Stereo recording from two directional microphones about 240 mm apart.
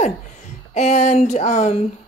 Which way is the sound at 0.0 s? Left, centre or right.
Left.